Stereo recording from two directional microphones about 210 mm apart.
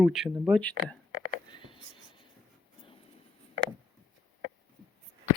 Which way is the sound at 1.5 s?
25° left (ahead or behind).